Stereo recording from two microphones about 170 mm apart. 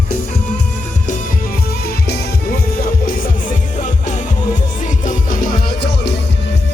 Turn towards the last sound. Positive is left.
turn(degrees=75)  # may be behind; listen again after turning